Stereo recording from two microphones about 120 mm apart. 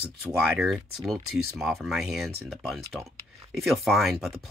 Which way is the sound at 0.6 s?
Centre (ahead or behind).